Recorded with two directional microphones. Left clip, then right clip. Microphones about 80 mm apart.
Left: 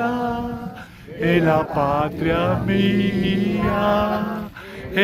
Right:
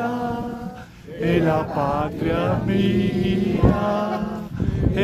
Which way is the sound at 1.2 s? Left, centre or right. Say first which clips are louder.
Left 2 dB; left.